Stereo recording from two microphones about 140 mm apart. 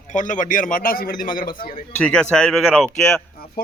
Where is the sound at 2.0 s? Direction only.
10° left (ahead or behind).